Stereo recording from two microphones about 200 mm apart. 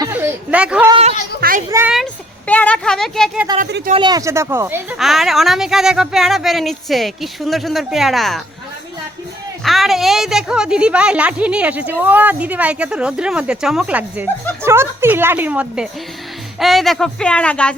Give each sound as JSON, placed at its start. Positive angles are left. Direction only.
{"t": 0.0, "sound": "a sound", "side_deg": -10}
{"t": 1.4, "sound": "children playing", "side_deg": -45}
{"t": 1.7, "sound": "a woman's voice", "side_deg": -5}
{"t": 2.5, "sound": "a woman's voice", "side_deg": 5}
{"t": 3.9, "sound": "a woman's voice", "side_deg": -20}
{"t": 4.9, "sound": "a woman's voice", "side_deg": 0}
{"t": 9.6, "sound": "a woman's voice", "side_deg": 0}